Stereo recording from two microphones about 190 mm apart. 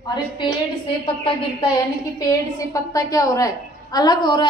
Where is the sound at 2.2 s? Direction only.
20° left (ahead or behind).